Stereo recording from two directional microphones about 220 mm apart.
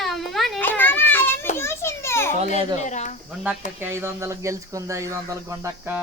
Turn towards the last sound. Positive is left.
turn(degrees=-10)  # may be behind; listen again after turning